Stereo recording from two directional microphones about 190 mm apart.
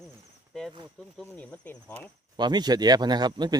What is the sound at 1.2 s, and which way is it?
Speech, 5° left (ahead or behind).